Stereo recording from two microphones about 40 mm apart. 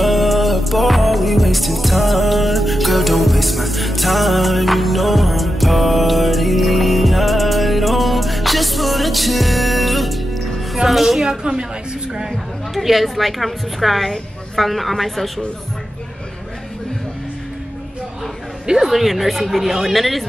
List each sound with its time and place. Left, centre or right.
0.0 s music: centre
11.2 s a woman's voice: centre
12.3 s a woman's voice: centre
18.8 s a woman's voice: centre